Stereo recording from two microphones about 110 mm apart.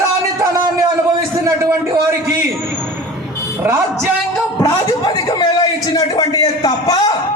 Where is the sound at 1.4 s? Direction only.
30° right (ahead or behind).